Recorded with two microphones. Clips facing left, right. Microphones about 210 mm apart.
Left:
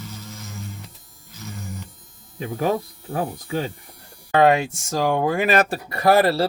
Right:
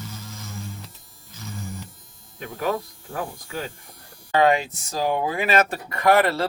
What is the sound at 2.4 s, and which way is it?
Speech, 35° left (ahead or behind).